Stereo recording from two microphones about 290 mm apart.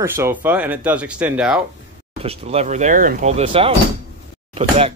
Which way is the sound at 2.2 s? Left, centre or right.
Right.